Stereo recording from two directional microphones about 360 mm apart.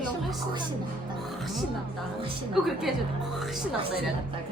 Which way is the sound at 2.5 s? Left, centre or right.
Centre.